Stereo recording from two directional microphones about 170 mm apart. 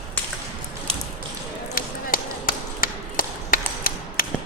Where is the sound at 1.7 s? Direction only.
55° left (ahead or behind).